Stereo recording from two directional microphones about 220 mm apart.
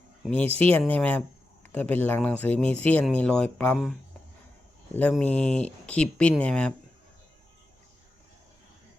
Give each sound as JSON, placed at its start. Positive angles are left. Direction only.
{"t": 0.4, "sound": "speech", "side_deg": -25}
{"t": 0.7, "sound": "speech", "side_deg": 5}
{"t": 4.9, "sound": "speech", "side_deg": 5}